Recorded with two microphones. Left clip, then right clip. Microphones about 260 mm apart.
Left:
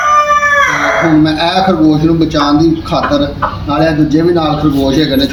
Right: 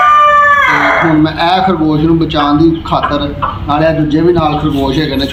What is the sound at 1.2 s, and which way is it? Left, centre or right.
Speech, centre.